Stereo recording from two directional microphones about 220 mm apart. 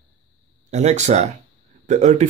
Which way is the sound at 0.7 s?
30° right (ahead or behind).